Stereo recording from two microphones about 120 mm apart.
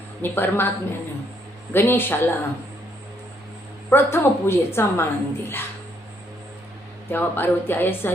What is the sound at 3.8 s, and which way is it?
A woman's voice, 20° left (ahead or behind).